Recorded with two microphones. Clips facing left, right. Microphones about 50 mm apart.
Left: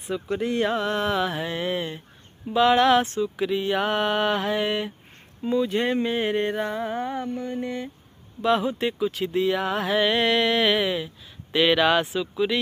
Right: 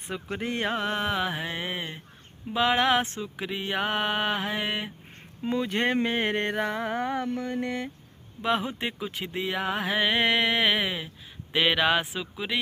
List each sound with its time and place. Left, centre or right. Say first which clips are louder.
0.0 s speech: left 6 dB; right
5.4 s speech: left 3 dB; right
8.4 s speech: left 5 dB; right